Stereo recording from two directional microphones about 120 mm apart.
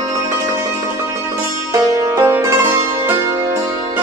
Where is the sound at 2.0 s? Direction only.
20° right (ahead or behind).